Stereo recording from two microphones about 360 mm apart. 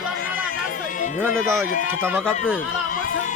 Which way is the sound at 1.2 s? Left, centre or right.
Centre.